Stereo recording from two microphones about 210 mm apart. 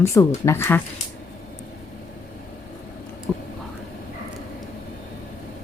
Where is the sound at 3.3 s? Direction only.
5° left (ahead or behind).